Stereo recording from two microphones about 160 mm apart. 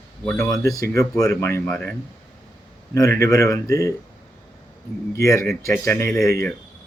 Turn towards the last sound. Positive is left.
turn(degrees=20)  # may be behind; listen again after turning